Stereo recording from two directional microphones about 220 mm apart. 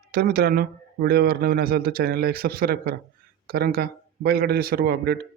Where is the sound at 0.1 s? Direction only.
45° right (ahead or behind).